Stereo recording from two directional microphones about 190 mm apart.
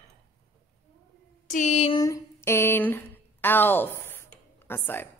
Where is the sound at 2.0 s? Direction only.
15° left (ahead or behind).